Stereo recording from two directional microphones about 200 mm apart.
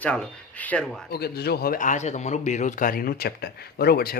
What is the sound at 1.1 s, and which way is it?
A man's voice, 50° left (ahead or behind).